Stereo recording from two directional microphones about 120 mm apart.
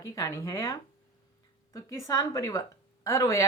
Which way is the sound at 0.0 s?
25° left (ahead or behind).